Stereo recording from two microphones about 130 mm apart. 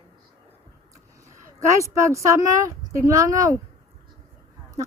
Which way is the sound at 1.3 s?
25° right (ahead or behind).